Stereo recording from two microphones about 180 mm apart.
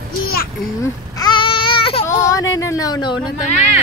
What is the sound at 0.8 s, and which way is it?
Babbling, 20° left (ahead or behind).